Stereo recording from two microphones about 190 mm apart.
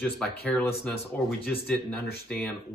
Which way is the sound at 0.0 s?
5° left (ahead or behind).